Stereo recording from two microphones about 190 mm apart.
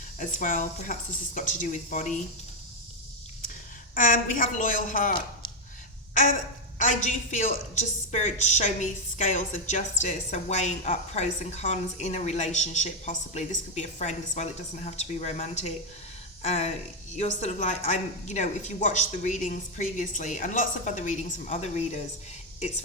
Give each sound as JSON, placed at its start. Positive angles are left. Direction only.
{"t": 0.2, "sound": "speech", "side_deg": 45}
{"t": 3.9, "sound": "speech", "side_deg": 45}
{"t": 6.7, "sound": "a woman's voice", "side_deg": 40}